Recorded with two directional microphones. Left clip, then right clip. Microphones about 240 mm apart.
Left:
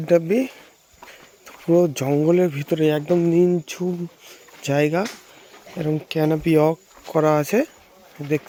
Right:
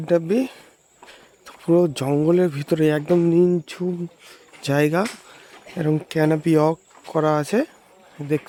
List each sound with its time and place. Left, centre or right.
0.0 s speech: centre